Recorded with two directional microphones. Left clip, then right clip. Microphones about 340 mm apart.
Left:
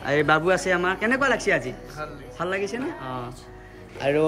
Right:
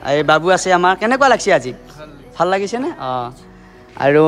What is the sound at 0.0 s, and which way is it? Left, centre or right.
A man's voice, centre.